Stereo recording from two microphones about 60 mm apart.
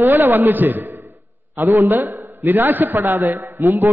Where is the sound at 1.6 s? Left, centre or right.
Right.